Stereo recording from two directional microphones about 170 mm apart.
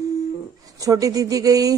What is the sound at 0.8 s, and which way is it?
Speech, 20° right (ahead or behind).